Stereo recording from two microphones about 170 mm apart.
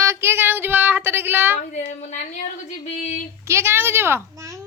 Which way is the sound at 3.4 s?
15° right (ahead or behind).